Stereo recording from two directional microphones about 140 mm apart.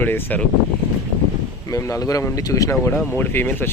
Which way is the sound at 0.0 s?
15° left (ahead or behind).